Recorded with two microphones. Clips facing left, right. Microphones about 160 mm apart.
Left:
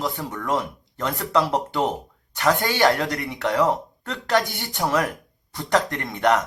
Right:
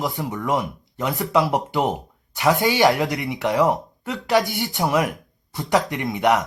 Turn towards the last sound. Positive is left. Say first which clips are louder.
# right 1 dB
turn(degrees=-15)  # may be behind; listen again after turning